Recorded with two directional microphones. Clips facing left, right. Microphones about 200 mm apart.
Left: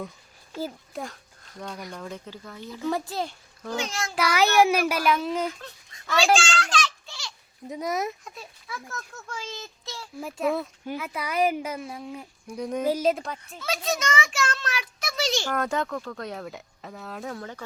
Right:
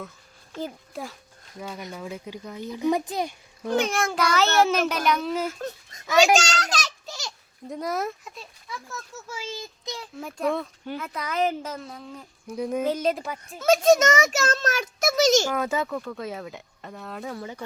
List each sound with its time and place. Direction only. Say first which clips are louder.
0.5 s a child's voice: even; 5° left (ahead or behind)
1.5 s a child's voice: right 1 dB; 5° right (ahead or behind)
3.8 s a child's voice: right 8 dB; 55° right (ahead or behind)
4.1 s speech: left 3 dB; 5° left (ahead or behind)
5.5 s speech: right 11 dB; 45° right (ahead or behind)
6.3 s a sound: right 1 dB; 40° right (ahead or behind)
7.7 s a child's voice: even; centre (ahead or behind); by 10.1 s 15° right (ahead or behind)
10.2 s speech: even; 5° left (ahead or behind)
12.5 s speech: right 3 dB; 5° right (ahead or behind)
12.8 s speech: left 3 dB; 5° left (ahead or behind)
13.6 s a child's voice: right 12 dB; 45° right (ahead or behind)
15.4 s speech: right 1 dB; 5° right (ahead or behind)